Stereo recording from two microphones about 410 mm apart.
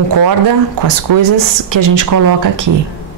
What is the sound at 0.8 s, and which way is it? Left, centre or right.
A man's voice, right.